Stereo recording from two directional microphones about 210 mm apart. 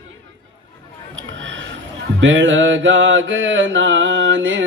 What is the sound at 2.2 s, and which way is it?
Mantra, 60° right (ahead or behind).